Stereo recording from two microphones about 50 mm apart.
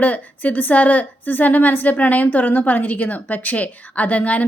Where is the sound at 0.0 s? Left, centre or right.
Left.